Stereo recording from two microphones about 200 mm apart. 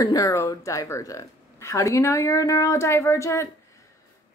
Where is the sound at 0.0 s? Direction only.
15° left (ahead or behind).